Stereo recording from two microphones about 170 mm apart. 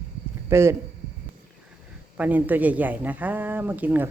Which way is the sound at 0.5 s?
15° right (ahead or behind).